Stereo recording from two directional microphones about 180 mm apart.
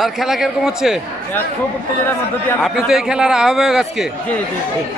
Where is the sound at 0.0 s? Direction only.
Centre (ahead or behind).